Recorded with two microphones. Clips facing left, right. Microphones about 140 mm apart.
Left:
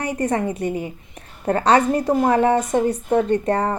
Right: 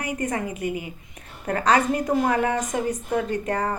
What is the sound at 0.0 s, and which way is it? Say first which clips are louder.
A woman's voice: left 5 dB; 35° left (ahead or behind).